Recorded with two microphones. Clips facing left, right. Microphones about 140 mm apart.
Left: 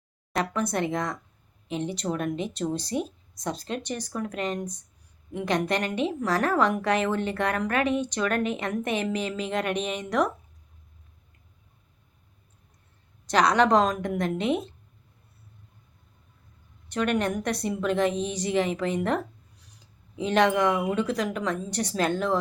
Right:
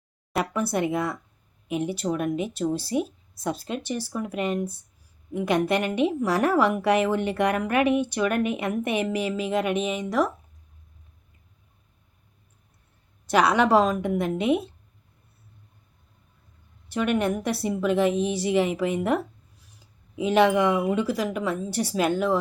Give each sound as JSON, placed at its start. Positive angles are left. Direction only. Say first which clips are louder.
{"t": 0.3, "sound": "speech", "louder": "right 1 dB", "side_deg": -10}
{"t": 13.2, "sound": "speech", "louder": "right 1 dB", "side_deg": -10}
{"t": 16.9, "sound": "speech", "louder": "right 2 dB", "side_deg": -10}